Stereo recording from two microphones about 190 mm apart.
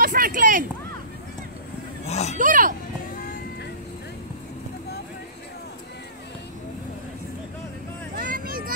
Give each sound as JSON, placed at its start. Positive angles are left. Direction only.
{"t": 0.0, "sound": "a sound", "side_deg": -45}
{"t": 2.0, "sound": "speech", "side_deg": 35}
{"t": 2.3, "sound": "speech", "side_deg": -45}
{"t": 8.2, "sound": "vehicle", "side_deg": -50}